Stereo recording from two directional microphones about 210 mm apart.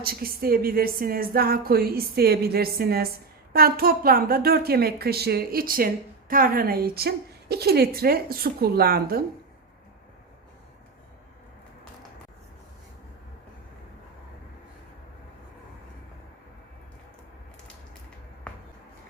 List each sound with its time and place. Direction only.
0.0 s a woman's voice: 45° right (ahead or behind)